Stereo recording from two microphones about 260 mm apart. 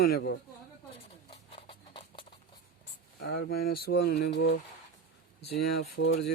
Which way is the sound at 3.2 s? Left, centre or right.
Left.